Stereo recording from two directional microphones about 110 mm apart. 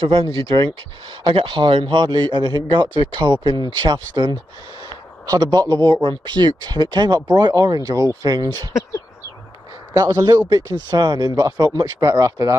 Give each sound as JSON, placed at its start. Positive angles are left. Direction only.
{"t": 0.0, "sound": "a man's voice", "side_deg": -55}
{"t": 9.9, "sound": "speech", "side_deg": -35}